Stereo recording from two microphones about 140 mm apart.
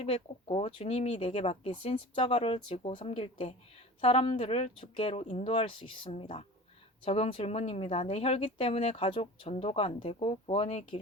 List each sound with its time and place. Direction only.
0.0 s speech: 45° left (ahead or behind)